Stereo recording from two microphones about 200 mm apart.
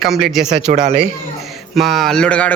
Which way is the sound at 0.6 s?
40° right (ahead or behind).